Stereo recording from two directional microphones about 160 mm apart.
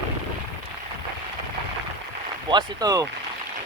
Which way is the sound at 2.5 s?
25° right (ahead or behind).